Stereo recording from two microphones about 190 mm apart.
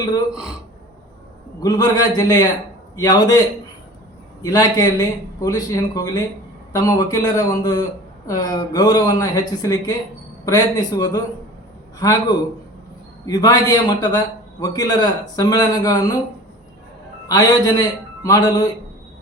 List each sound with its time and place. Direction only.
1.6 s speech: 20° left (ahead or behind)
4.4 s speech: 20° left (ahead or behind)
17.2 s speech: 20° left (ahead or behind)